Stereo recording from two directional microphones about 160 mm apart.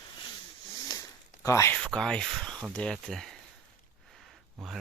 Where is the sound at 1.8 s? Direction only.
5° left (ahead or behind).